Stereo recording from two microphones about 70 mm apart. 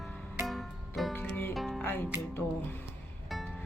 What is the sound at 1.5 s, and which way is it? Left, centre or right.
Music, centre.